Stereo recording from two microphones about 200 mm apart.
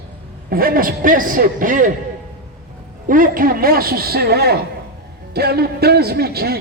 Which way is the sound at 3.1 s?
45° right (ahead or behind).